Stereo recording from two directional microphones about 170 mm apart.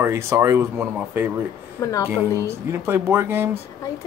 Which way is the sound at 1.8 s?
20° left (ahead or behind).